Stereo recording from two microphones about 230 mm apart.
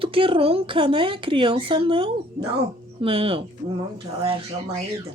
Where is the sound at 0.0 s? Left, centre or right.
Right.